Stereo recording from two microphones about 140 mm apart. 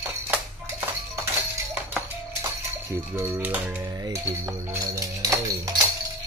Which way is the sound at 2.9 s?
20° right (ahead or behind).